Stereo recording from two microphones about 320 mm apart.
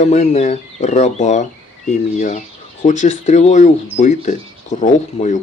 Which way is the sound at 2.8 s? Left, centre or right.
Left.